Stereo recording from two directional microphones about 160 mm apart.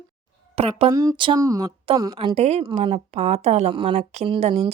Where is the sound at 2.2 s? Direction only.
35° right (ahead or behind).